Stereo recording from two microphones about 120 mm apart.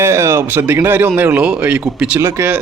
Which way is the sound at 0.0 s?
25° right (ahead or behind).